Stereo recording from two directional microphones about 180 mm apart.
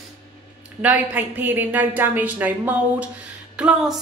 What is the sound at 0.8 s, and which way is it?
A woman's voice, 10° right (ahead or behind).